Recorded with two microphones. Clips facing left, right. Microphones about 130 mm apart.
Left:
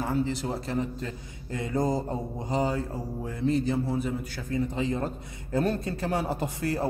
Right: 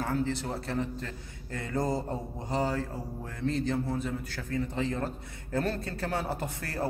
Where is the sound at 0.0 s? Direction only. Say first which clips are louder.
Left 2 dB; 15° left (ahead or behind).